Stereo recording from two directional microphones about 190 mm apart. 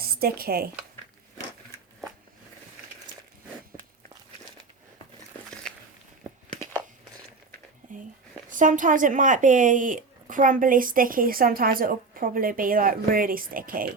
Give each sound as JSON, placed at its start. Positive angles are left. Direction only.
{"t": 0.0, "sound": "speech", "side_deg": -55}
{"t": 8.4, "sound": "speech", "side_deg": -45}